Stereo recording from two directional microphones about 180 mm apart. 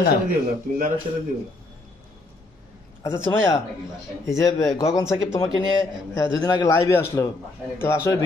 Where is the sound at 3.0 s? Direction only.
15° left (ahead or behind).